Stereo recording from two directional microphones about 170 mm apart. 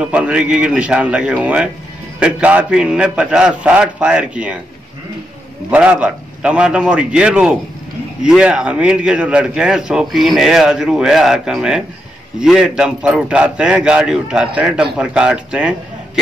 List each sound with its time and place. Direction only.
0.0 s a man's voice: 5° right (ahead or behind)
5.7 s a man's voice: 5° right (ahead or behind)